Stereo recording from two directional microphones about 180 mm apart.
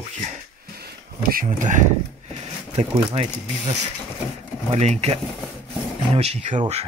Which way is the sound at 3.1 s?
35° right (ahead or behind).